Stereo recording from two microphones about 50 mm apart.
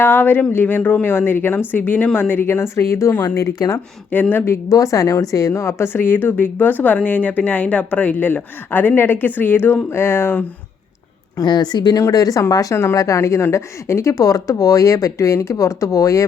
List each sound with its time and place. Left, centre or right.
0.0 s speech: left
3.3 s speech: left
4.1 s speech: left
4.4 s speech: left
5.8 s speech: left
9.9 s speech: left
11.9 s speech: left
13.4 s speech: left